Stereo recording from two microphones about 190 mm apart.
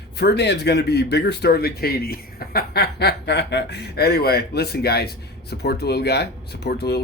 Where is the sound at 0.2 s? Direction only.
60° left (ahead or behind).